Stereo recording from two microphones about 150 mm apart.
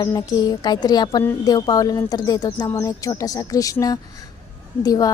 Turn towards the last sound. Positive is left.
turn(degrees=25)  # may be behind; listen again after turning